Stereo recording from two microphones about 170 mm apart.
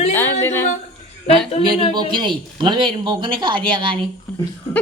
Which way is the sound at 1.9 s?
25° right (ahead or behind).